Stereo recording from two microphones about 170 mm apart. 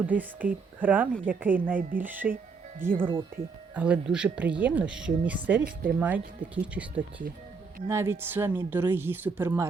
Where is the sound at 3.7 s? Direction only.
10° right (ahead or behind).